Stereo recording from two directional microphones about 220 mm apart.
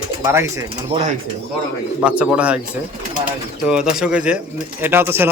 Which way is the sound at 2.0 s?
5° right (ahead or behind).